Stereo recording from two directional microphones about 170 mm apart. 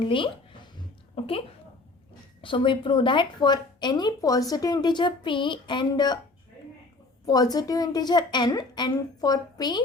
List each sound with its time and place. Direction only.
0.0 s a woman's voice: 30° left (ahead or behind)
2.4 s a woman's voice: 30° left (ahead or behind)
7.3 s a woman's voice: 20° left (ahead or behind)